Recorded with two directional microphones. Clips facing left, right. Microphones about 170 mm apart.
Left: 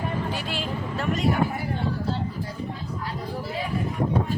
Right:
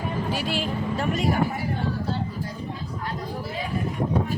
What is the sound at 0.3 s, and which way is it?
Vehicle, 10° right (ahead or behind).